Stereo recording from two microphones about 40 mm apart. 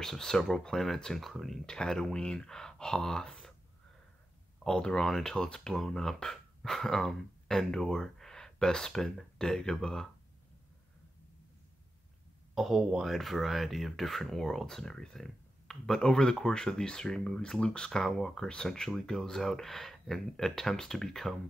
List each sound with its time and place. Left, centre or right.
0.0 s speech: centre
1.7 s speech: centre
4.6 s speech: centre
5.0 s speech: centre
5.3 s speech: centre
12.5 s speech: centre